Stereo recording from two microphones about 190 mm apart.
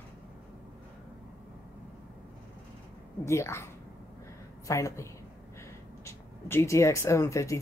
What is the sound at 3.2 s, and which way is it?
Speech, 15° left (ahead or behind).